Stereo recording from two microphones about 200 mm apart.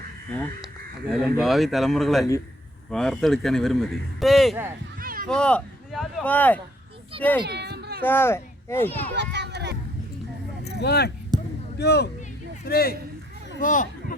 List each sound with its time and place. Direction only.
0.3 s a child's voice: 10° left (ahead or behind)
4.9 s a sound: 45° right (ahead or behind)
5.3 s a child's voice: 5° left (ahead or behind)
7.4 s a sound: 55° right (ahead or behind)
8.0 s a child's voice: 10° left (ahead or behind)
9.1 s children playing: 60° right (ahead or behind)
10.6 s vehicle: 55° left (ahead or behind)
11.3 s basketball bounce: 20° right (ahead or behind)
11.8 s speech: 55° left (ahead or behind)
13.6 s a sound: 40° left (ahead or behind)